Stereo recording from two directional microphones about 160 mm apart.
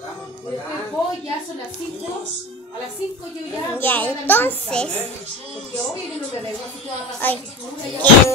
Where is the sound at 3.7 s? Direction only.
10° left (ahead or behind).